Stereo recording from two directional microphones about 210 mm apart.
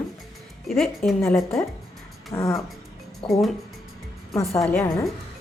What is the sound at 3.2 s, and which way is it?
Speech, 25° left (ahead or behind).